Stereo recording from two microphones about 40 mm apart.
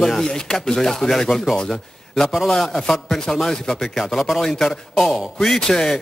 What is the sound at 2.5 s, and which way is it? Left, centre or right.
Speech, centre.